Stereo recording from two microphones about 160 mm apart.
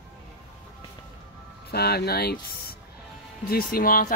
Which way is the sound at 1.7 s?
80° left.